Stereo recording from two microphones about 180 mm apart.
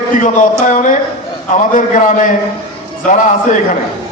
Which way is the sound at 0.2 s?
45° left (ahead or behind).